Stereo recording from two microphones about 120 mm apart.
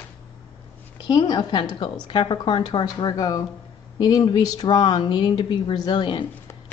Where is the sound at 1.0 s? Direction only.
35° left (ahead or behind).